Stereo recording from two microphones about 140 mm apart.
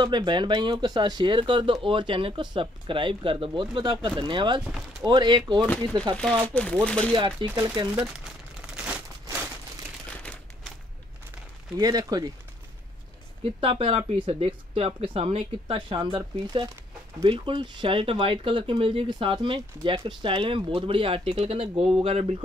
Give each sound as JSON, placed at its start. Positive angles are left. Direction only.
{"t": 0.0, "sound": "speech", "side_deg": -30}
{"t": 6.4, "sound": "speech", "side_deg": 10}
{"t": 7.1, "sound": "speech", "side_deg": -35}
{"t": 8.7, "sound": "a sound", "side_deg": -10}
{"t": 10.0, "sound": "typewriter", "side_deg": 10}
{"t": 11.8, "sound": "speech", "side_deg": -25}
{"t": 13.4, "sound": "speech", "side_deg": -40}